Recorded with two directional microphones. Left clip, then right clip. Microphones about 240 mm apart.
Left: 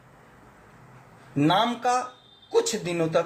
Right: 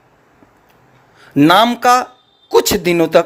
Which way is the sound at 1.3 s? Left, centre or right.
Right.